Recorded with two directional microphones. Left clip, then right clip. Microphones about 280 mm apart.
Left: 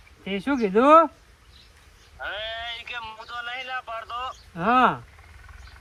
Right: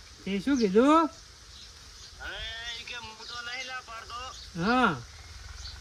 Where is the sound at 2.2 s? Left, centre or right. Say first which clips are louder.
Left 6 dB; centre.